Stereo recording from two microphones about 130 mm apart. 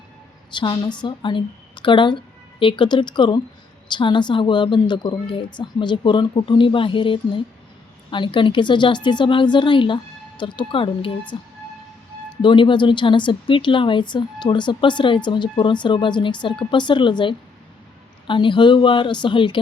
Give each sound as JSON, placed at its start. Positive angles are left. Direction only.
{"t": 0.5, "sound": "speech", "side_deg": 35}
{"t": 12.4, "sound": "speech", "side_deg": 40}